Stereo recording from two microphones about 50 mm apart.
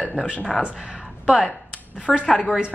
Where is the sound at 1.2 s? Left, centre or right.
Centre.